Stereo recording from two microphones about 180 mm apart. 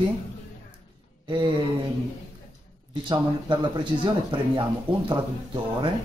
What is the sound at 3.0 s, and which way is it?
Speech, 25° right (ahead or behind).